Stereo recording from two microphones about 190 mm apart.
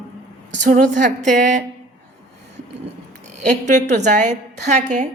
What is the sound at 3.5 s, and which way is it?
A woman's voice, 40° right (ahead or behind).